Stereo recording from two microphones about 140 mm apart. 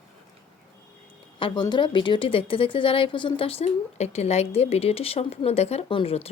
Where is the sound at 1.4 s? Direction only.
35° left (ahead or behind).